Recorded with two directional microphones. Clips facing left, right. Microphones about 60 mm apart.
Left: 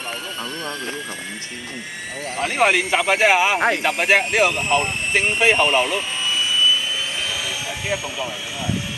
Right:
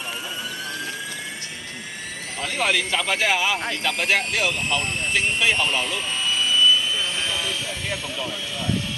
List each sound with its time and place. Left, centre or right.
2.3 s speech: left
3.9 s speech: left
5.8 s speech: centre
6.2 s vehicle: centre
7.4 s helicopter: centre